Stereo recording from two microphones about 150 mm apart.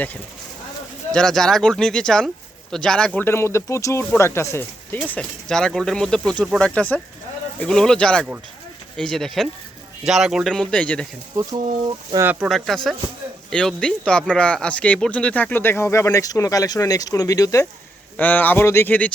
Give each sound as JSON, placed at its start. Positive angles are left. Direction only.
{"t": 1.1, "sound": "speech", "side_deg": 5}
{"t": 3.2, "sound": "speech", "side_deg": 15}
{"t": 12.1, "sound": "speech", "side_deg": -15}
{"t": 12.5, "sound": "speech", "side_deg": 0}
{"t": 18.2, "sound": "speech", "side_deg": 10}